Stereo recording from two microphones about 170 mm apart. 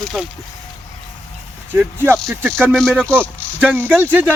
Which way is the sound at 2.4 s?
Centre (ahead or behind).